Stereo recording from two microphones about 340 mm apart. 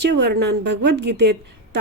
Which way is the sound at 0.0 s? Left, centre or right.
Right.